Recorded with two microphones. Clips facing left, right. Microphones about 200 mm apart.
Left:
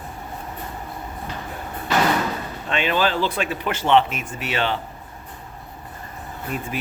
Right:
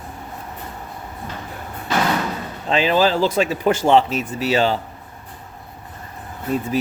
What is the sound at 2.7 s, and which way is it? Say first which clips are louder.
Speech: right 5 dB; 35° right (ahead or behind).